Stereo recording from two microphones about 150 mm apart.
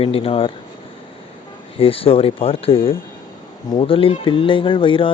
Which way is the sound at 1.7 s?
40° left (ahead or behind).